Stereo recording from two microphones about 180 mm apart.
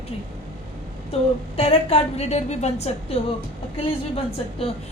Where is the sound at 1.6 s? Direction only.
35° left (ahead or behind).